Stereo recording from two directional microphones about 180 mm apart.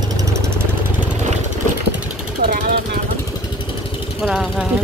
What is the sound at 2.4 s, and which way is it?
Vehicle, 50° right (ahead or behind).